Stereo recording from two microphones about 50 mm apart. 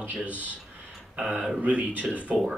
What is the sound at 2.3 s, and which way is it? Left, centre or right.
Speech, centre.